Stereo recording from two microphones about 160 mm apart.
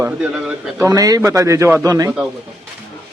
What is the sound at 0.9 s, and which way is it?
Speech, 20° right (ahead or behind).